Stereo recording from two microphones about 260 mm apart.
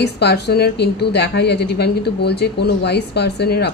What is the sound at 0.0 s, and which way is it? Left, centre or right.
A woman's voice, left.